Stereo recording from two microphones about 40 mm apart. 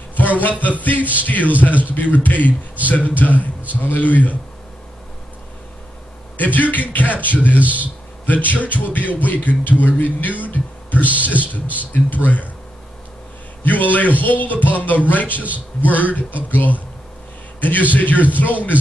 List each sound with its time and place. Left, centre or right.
0.1 s a man's voice: left
6.3 s speech: left
13.7 s speech: left